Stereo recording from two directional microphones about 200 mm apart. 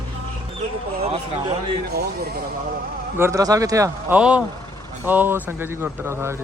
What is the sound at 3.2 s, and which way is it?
Speech, 15° right (ahead or behind).